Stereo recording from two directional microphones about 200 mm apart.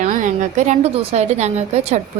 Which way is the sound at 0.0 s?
35° right (ahead or behind).